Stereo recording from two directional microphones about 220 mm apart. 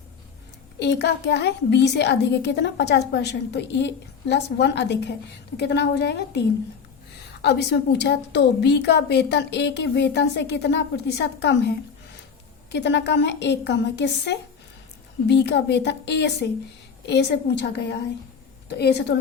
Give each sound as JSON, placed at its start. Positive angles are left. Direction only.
{"t": 0.8, "sound": "a woman's voice", "side_deg": 50}
{"t": 7.4, "sound": "a woman's voice", "side_deg": 50}
{"t": 12.7, "sound": "a woman's voice", "side_deg": 50}